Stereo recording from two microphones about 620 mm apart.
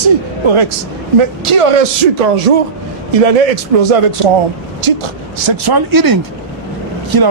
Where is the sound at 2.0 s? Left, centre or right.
Right.